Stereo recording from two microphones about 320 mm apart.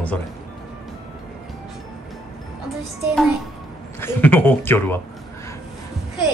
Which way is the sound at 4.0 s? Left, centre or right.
Centre.